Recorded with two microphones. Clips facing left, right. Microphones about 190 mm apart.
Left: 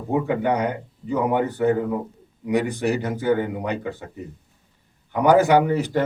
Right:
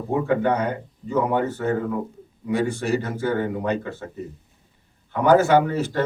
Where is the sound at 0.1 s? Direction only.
15° left (ahead or behind).